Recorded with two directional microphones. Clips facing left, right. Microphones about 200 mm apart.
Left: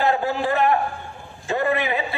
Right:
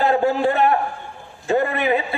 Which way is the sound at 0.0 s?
35° right (ahead or behind).